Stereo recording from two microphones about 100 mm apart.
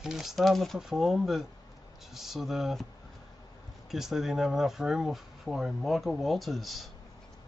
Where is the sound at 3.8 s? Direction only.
5° right (ahead or behind).